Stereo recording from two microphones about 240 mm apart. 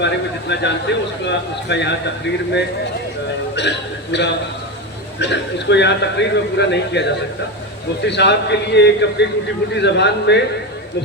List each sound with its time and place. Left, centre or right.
0.0 s speech: left
3.5 s a man's voice: left